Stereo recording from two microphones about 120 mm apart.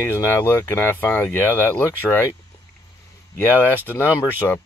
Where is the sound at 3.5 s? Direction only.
15° left (ahead or behind).